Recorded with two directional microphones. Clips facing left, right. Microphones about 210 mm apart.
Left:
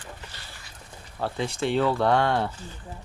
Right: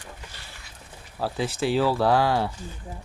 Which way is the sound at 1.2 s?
5° right (ahead or behind).